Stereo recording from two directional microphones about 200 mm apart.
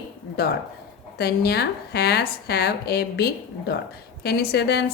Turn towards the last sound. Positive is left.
turn(degrees=55)  # may be behind; listen again after turning